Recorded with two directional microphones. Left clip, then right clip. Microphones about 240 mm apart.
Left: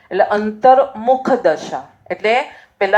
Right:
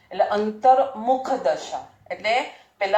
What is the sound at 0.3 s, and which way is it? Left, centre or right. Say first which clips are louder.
A woman's voice: left 5 dB; centre.